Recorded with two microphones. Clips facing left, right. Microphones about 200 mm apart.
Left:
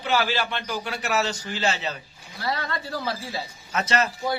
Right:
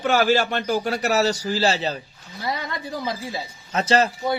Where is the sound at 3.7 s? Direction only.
30° right (ahead or behind).